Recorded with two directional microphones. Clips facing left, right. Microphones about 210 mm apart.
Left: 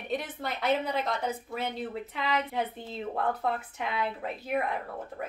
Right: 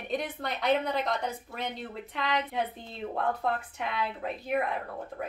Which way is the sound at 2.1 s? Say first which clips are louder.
Right 1 dB; centre (ahead or behind).